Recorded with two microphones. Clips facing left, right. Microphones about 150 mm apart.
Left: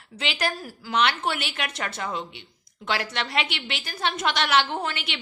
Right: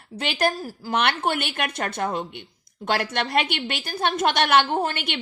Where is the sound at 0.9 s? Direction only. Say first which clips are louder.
Right 1 dB; 55° right (ahead or behind).